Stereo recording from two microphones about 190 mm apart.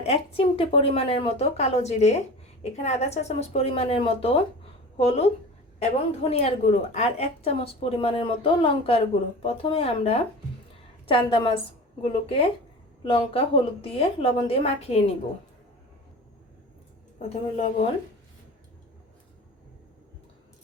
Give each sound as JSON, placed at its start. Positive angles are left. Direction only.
{"t": 0.0, "sound": "a woman's voice", "side_deg": 30}
{"t": 17.2, "sound": "a woman's voice", "side_deg": 35}